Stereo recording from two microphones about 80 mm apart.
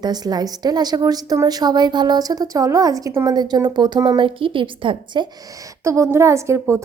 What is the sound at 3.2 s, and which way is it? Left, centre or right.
Speech, right.